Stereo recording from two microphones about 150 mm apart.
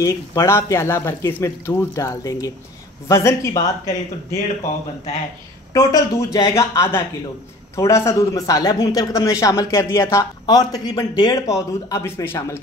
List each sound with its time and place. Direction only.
0.0 s speech: 20° left (ahead or behind)
5.7 s speech: 25° left (ahead or behind)